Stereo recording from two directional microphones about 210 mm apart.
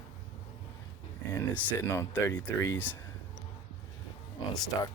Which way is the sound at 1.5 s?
10° left (ahead or behind).